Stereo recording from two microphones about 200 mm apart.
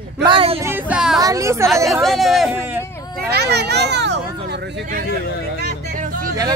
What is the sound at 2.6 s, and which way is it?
Speech, 10° right (ahead or behind).